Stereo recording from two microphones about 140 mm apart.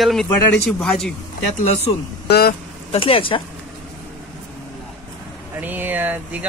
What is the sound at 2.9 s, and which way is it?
Speech, 40° left (ahead or behind).